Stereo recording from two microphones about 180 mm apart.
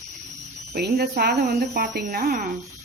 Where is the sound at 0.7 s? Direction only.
55° right (ahead or behind).